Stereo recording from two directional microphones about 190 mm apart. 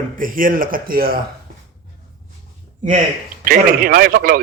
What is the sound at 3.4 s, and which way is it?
Speech, 50° right (ahead or behind).